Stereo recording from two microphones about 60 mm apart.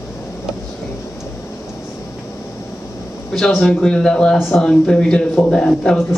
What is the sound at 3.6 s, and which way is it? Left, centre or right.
Speech, centre.